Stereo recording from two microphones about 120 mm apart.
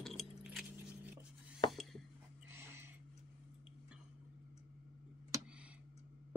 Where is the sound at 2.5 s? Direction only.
20° right (ahead or behind).